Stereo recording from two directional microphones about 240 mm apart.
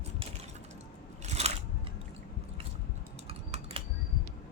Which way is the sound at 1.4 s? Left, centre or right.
Right.